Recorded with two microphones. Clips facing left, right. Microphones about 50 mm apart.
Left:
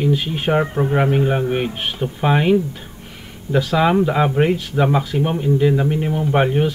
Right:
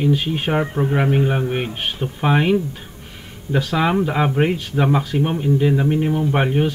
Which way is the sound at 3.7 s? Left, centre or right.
Centre.